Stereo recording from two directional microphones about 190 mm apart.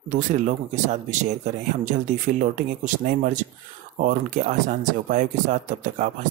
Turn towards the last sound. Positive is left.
turn(degrees=-40)  # may be behind; listen again after turning